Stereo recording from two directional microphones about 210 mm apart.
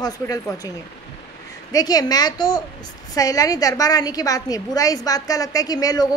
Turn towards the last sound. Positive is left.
turn(degrees=15)  # may be behind; listen again after turning